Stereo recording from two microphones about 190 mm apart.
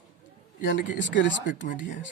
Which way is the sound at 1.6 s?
70° left (ahead or behind).